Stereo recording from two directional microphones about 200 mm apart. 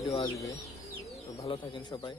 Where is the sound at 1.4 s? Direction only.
25° left (ahead or behind).